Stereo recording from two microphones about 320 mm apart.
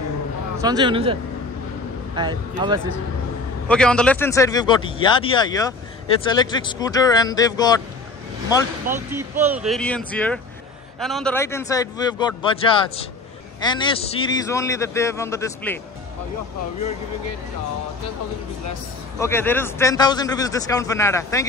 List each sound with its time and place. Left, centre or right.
0.6 s speech: centre
2.1 s speech: centre
3.6 s a man's voice: centre
8.9 s speech: right
9.5 s a man's voice: centre
19.1 s a man's voice: centre